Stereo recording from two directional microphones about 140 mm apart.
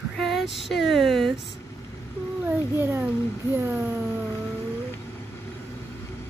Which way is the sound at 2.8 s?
15° right (ahead or behind).